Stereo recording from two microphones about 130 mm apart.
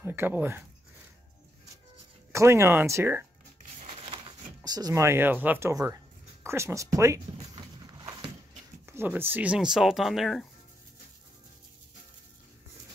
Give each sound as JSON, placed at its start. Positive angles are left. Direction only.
{"t": 0.0, "sound": "speech", "side_deg": -15}
{"t": 2.3, "sound": "speech", "side_deg": -20}
{"t": 3.8, "sound": "a sound", "side_deg": -50}
{"t": 4.6, "sound": "speech", "side_deg": -30}
{"t": 7.5, "sound": "a sound", "side_deg": -40}
{"t": 8.8, "sound": "speech", "side_deg": -15}